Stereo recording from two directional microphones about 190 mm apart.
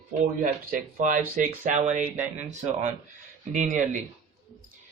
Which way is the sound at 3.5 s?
40° right (ahead or behind).